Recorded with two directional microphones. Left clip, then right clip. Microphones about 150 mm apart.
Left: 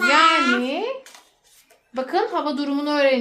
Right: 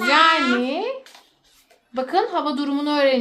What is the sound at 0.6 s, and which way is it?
Speech, 40° right (ahead or behind).